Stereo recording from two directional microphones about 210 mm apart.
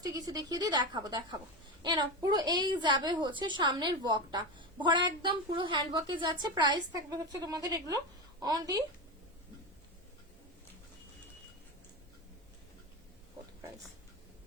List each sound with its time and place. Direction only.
0.0 s a child's voice: 20° right (ahead or behind)